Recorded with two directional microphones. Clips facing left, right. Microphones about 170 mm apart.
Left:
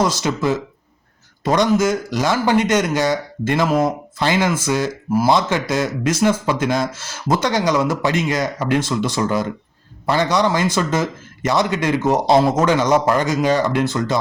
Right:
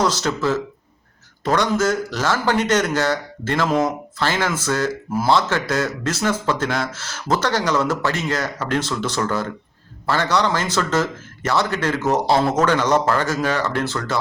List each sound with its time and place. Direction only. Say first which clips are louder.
0.0 s speech: left 1 dB; 10° left (ahead or behind)